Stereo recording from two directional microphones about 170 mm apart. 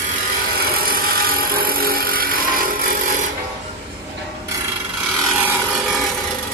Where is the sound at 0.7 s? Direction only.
60° right (ahead or behind).